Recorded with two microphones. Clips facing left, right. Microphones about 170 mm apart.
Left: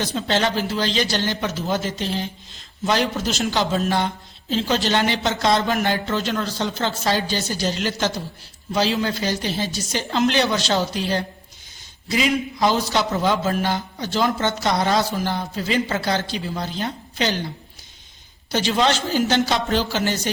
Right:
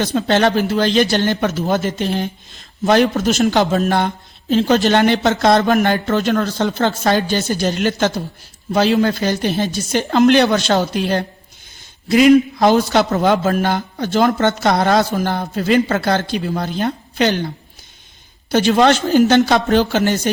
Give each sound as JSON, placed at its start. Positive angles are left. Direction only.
{"t": 0.0, "sound": "speech", "side_deg": -60}
{"t": 18.5, "sound": "speech", "side_deg": -55}